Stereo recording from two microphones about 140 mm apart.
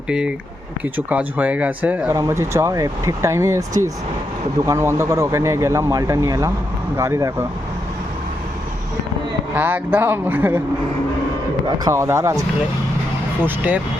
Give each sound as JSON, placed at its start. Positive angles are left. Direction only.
{"t": 0.1, "sound": "speech", "side_deg": -5}
{"t": 4.6, "sound": "speech", "side_deg": -20}
{"t": 9.6, "sound": "speech", "side_deg": -15}
{"t": 11.9, "sound": "speech", "side_deg": -20}
{"t": 13.4, "sound": "speech", "side_deg": -10}